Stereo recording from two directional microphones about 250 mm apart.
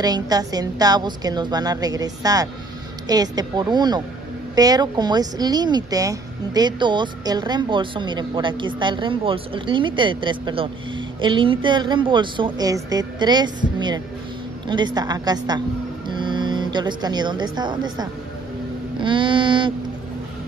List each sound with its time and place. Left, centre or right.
0.0 s a woman's voice: centre